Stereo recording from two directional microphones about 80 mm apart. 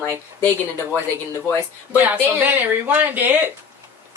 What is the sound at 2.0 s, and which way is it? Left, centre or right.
Speech, right.